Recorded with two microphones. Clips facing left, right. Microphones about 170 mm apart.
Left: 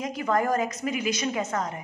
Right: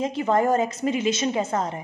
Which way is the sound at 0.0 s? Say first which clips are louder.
Right 4 dB; 25° right (ahead or behind).